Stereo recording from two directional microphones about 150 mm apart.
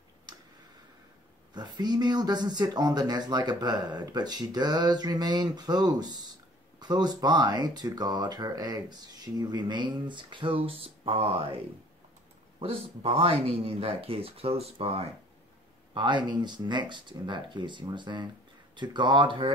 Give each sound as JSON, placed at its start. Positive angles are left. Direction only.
{"t": 1.5, "sound": "speech", "side_deg": -30}
{"t": 15.9, "sound": "speech", "side_deg": -30}